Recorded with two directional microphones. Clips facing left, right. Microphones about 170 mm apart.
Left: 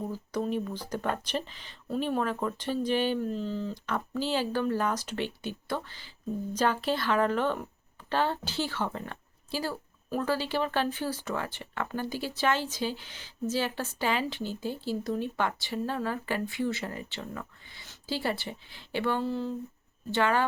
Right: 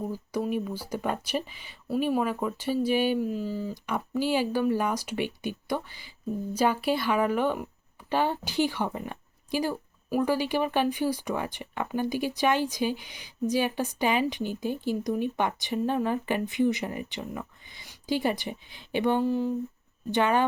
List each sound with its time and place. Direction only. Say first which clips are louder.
0.1 s speech: right 2 dB; 10° right (ahead or behind)